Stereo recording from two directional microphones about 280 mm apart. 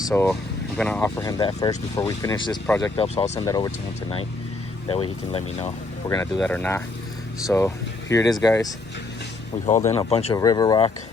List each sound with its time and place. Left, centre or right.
0.0 s speech: centre
4.9 s speech: centre
9.9 s speech: left